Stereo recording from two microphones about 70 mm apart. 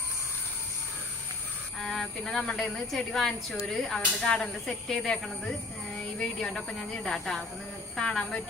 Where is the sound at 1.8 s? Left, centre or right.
Centre.